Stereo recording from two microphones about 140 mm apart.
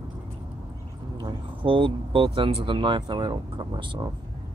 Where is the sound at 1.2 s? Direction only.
35° right (ahead or behind).